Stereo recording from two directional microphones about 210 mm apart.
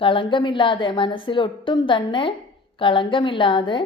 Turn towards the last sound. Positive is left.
turn(degrees=25)  # may be behind; listen again after turning